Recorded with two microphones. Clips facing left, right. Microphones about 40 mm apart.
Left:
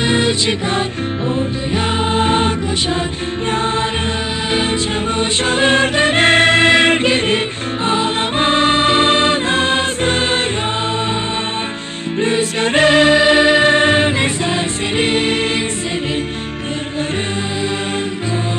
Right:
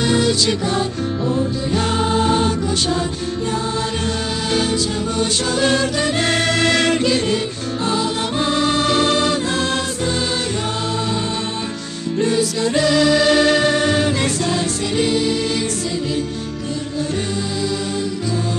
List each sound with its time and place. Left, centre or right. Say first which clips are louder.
0.1 s music: left 1 dB; left
2.0 s music: left 2 dB; left